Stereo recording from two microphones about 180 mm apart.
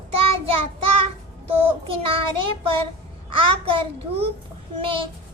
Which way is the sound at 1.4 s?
30° right (ahead or behind).